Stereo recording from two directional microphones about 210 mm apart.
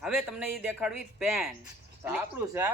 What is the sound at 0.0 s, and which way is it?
Speech, centre (ahead or behind).